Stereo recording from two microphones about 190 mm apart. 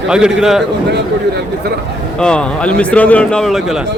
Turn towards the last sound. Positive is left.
turn(degrees=0)  # may be behind; listen again after turning